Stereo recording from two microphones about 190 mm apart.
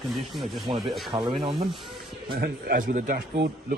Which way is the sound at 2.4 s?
50° right (ahead or behind).